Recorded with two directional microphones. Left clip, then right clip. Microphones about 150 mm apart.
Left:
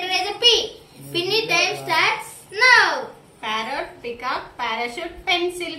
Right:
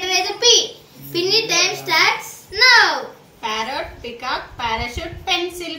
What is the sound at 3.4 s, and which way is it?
A woman's voice, 10° right (ahead or behind).